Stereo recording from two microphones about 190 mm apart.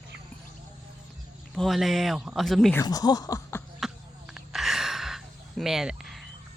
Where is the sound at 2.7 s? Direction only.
20° left (ahead or behind).